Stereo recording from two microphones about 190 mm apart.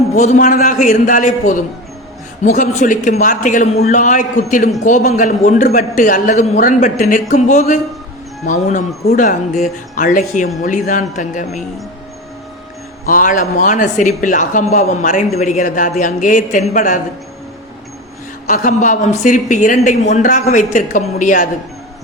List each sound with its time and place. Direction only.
0.2 s speech: 40° left (ahead or behind)
13.1 s speech: 45° left (ahead or behind)
18.4 s speech: 45° left (ahead or behind)